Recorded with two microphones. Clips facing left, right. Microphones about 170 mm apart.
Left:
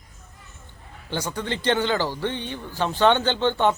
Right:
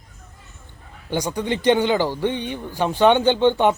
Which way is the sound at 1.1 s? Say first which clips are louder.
Right 5 dB; 15° right (ahead or behind).